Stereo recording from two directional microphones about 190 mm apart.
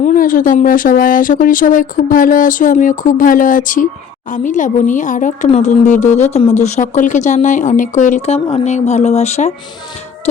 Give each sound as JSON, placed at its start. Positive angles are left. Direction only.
{"t": 0.0, "sound": "speech", "side_deg": 45}